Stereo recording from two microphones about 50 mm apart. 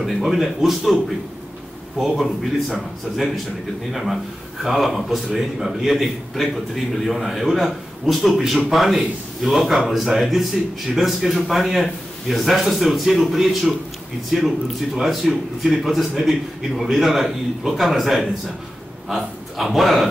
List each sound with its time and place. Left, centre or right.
0.0 s speech: centre
2.0 s speech: centre
3.9 s speech: centre